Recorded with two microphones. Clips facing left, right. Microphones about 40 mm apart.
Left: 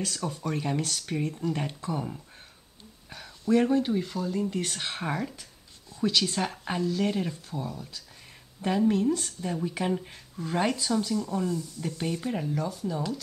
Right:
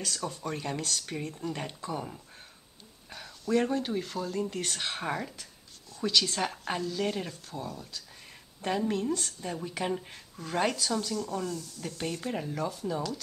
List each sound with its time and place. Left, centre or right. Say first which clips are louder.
0.0 s speech: left 3 dB; centre
0.7 s speech: left 3 dB; centre
1.3 s speech: left 5 dB; centre
3.1 s a sound: even; centre
3.6 s speech: left 5 dB; centre
5.4 s writing: even; centre
6.4 s speech: left 2 dB; centre
7.6 s speech: left 2 dB; left
8.5 s speech: left 5 dB; centre
11.0 s speech: left 4 dB; centre
12.0 s speech: left 2 dB; centre